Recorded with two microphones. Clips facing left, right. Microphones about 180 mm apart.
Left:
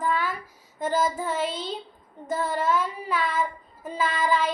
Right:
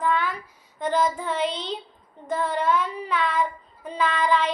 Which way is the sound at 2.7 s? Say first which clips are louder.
Right 1 dB; 45° left (ahead or behind).